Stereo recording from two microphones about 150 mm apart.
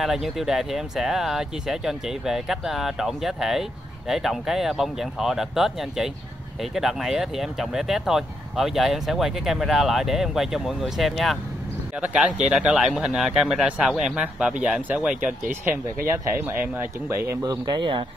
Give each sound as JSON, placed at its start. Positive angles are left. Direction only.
{"t": 0.0, "sound": "speech", "side_deg": 0}